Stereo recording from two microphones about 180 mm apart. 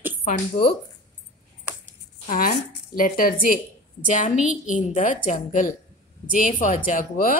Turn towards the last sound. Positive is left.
turn(degrees=50)  # may be behind; listen again after turning